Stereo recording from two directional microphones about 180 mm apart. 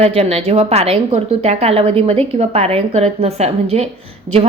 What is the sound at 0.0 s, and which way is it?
A woman's voice, 35° right (ahead or behind).